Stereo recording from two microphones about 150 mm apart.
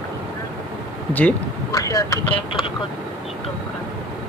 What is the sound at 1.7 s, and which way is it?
Speech, 20° left (ahead or behind).